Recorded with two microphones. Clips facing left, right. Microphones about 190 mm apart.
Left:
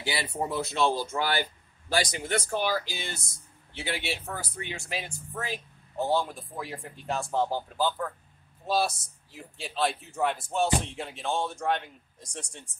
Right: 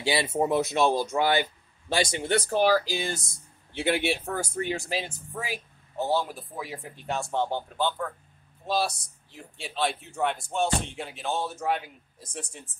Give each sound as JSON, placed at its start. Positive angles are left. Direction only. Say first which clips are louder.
{"t": 0.0, "sound": "speech", "louder": "right 6 dB", "side_deg": -25}
{"t": 3.7, "sound": "speech", "louder": "right 8 dB", "side_deg": -55}
{"t": 5.3, "sound": "speech", "louder": "left 1 dB", "side_deg": -10}